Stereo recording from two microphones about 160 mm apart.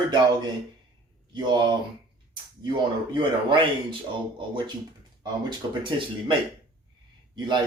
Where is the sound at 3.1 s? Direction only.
30° right (ahead or behind).